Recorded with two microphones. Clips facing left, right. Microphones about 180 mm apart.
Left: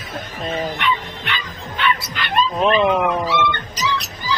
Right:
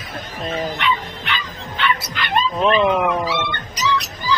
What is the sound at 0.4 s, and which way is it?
Speech, centre (ahead or behind).